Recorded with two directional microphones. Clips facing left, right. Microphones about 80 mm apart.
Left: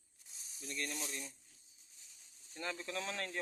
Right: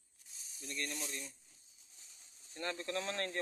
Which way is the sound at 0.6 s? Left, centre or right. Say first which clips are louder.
Even; centre.